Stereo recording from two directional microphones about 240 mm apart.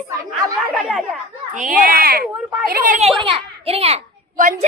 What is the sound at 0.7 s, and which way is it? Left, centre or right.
Speech, centre.